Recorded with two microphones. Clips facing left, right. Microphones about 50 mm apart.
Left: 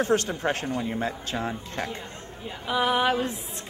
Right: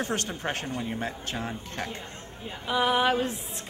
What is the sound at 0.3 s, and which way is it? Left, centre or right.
Speech, left.